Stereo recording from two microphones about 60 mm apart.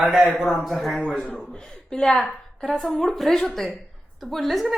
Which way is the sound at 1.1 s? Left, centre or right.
Left.